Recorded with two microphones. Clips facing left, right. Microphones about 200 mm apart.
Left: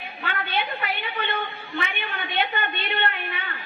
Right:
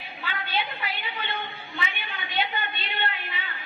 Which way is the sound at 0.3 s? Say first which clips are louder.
Left 3 dB; 60° left (ahead or behind).